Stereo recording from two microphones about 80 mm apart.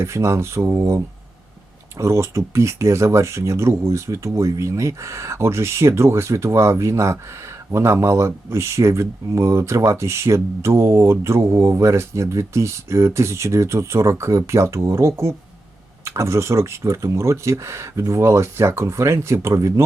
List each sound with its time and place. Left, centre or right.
0.0 s speech: right